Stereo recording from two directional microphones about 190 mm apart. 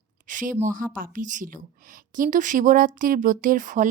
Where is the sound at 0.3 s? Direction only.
45° right (ahead or behind).